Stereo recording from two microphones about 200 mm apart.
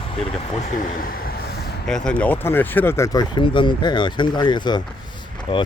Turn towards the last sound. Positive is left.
turn(degrees=25)  # may be behind; listen again after turning